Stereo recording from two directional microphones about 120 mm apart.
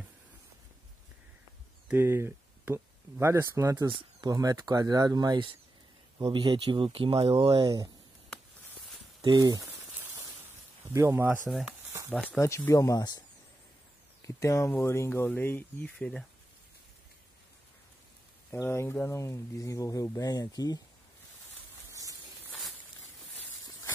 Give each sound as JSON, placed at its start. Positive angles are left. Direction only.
{"t": 1.9, "sound": "speech", "side_deg": -15}
{"t": 7.6, "sound": "speech", "side_deg": -30}
{"t": 9.2, "sound": "speech", "side_deg": -35}
{"t": 9.7, "sound": "a sound", "side_deg": -20}
{"t": 10.9, "sound": "speech", "side_deg": -20}
{"t": 12.3, "sound": "speech", "side_deg": 20}
{"t": 14.2, "sound": "speech", "side_deg": 25}
{"t": 18.5, "sound": "speech", "side_deg": 20}